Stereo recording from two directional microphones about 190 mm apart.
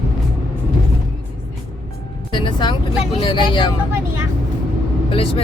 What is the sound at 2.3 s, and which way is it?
Speech, 25° left (ahead or behind).